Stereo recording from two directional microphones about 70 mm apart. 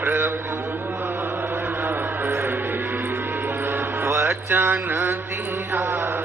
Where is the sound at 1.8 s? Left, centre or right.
Right.